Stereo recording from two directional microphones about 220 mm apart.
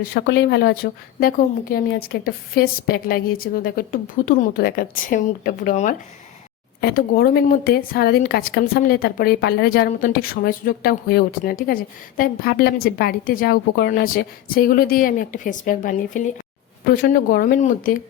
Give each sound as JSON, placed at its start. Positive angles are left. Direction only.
{"t": 0.0, "sound": "a woman's voice", "side_deg": 45}